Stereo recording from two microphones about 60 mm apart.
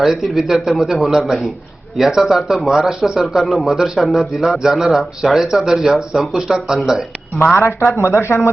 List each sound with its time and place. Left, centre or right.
0.0 s a man's voice: centre
7.5 s speech: left